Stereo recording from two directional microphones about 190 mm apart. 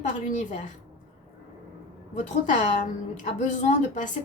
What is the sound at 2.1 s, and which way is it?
A woman's voice, 40° left (ahead or behind).